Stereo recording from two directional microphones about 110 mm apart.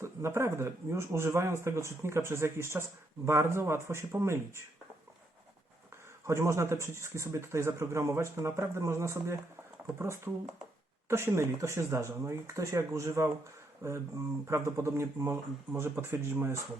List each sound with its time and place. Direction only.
0.0 s speech: 25° right (ahead or behind)
6.2 s speech: 25° right (ahead or behind)